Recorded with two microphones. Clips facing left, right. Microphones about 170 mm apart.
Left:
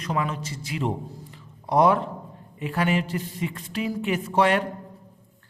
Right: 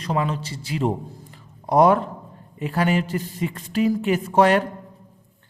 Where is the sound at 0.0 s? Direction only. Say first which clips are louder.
Right 3 dB; 30° right (ahead or behind).